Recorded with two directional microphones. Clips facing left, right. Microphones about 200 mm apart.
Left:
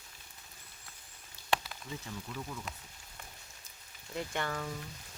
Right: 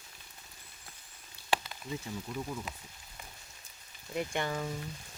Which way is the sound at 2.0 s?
15° right (ahead or behind).